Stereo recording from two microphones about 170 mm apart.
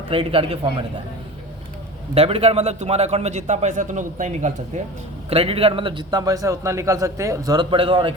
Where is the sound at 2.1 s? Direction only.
35° right (ahead or behind).